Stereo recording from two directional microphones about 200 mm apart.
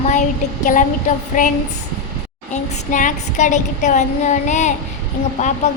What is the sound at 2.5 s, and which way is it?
Child singing, 40° left (ahead or behind).